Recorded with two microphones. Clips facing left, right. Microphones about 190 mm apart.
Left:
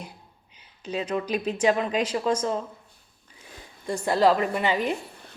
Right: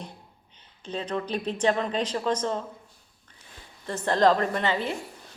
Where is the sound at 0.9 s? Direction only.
10° left (ahead or behind).